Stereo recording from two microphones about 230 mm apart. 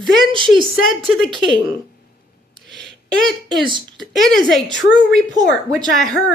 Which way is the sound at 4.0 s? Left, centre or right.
Centre.